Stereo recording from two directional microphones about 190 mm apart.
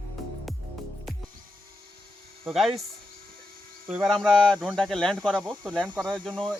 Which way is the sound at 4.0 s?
Centre (ahead or behind).